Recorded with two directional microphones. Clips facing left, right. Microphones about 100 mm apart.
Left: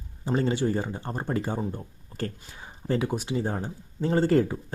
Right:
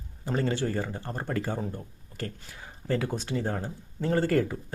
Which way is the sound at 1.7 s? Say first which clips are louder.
Left 2 dB; 30° left (ahead or behind).